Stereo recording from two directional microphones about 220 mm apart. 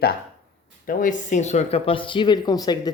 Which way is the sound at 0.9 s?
35° left (ahead or behind).